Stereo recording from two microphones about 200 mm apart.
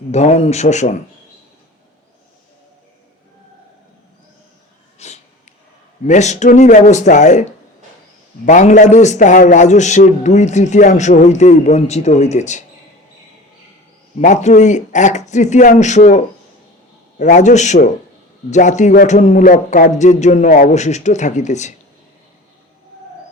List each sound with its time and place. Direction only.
0.1 s a man's voice: 35° left (ahead or behind)
4.9 s a sound: 35° left (ahead or behind)
6.1 s a man's voice: 35° left (ahead or behind)
8.4 s a man's voice: 35° left (ahead or behind)
14.2 s a man's voice: 35° left (ahead or behind)